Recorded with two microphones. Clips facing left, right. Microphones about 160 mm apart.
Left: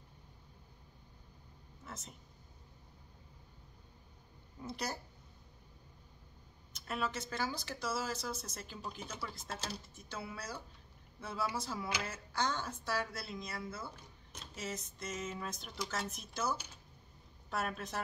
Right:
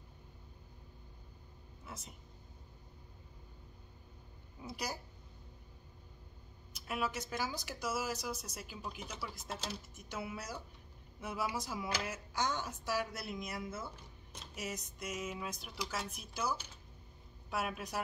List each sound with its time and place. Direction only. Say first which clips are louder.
1.9 s speech: left 1 dB; 10° right (ahead or behind)
4.6 s speech: left 1 dB; 10° right (ahead or behind)
6.9 s speech: even; 10° right (ahead or behind)